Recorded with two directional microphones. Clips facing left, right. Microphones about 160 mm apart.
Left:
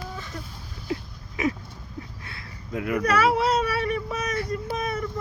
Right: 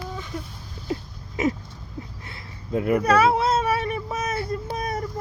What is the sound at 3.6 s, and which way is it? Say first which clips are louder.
Vehicle: right 1 dB; 25° right (ahead or behind).